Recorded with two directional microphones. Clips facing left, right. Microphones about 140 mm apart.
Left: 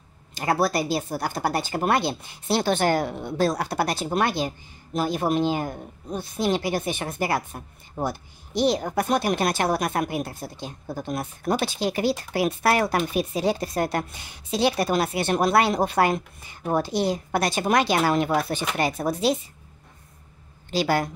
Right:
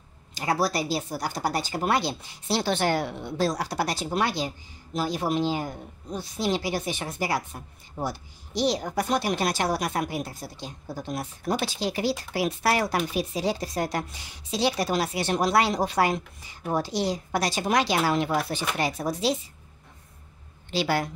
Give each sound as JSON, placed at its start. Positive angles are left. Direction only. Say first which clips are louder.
{"t": 0.3, "sound": "a woman's voice", "louder": "left 3 dB", "side_deg": 55}
{"t": 20.7, "sound": "speech", "louder": "left 3 dB", "side_deg": 45}